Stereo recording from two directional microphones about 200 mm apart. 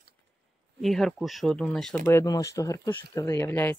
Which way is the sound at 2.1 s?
15° left (ahead or behind).